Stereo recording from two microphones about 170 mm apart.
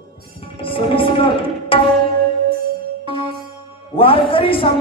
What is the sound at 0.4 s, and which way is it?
Music, 30° left (ahead or behind).